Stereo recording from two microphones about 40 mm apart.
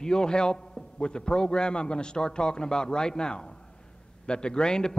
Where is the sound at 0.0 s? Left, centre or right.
Centre.